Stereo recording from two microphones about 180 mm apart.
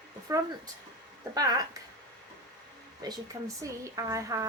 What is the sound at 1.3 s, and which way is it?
Speech, 20° right (ahead or behind).